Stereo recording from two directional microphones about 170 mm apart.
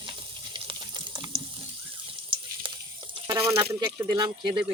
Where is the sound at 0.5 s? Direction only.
30° right (ahead or behind).